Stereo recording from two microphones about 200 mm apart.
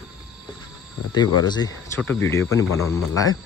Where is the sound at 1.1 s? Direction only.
20° left (ahead or behind).